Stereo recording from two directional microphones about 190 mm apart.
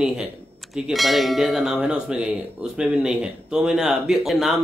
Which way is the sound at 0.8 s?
Centre (ahead or behind).